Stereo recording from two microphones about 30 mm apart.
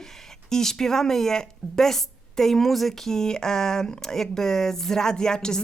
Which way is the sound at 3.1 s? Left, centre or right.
Centre.